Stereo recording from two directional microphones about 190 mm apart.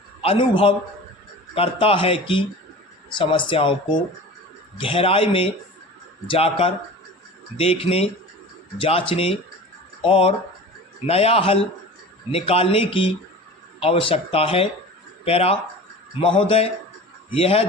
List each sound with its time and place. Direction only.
0.2 s a man's voice: 30° left (ahead or behind)